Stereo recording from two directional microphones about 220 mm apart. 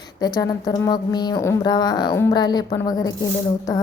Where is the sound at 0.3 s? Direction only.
15° left (ahead or behind).